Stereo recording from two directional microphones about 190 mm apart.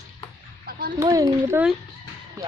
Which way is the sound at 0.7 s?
50° right (ahead or behind).